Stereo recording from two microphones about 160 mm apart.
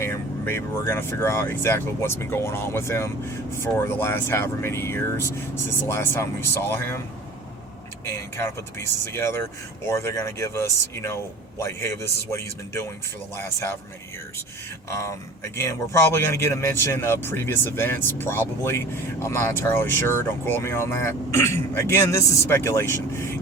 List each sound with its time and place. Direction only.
0.0 s speech: 15° left (ahead or behind)
8.0 s speech: 15° left (ahead or behind)
14.8 s speech: 20° left (ahead or behind)